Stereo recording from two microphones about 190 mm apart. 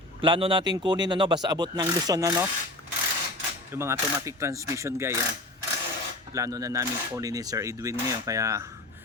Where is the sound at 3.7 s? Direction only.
10° right (ahead or behind).